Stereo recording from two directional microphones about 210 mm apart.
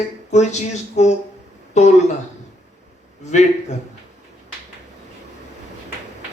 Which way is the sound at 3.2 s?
35° left (ahead or behind).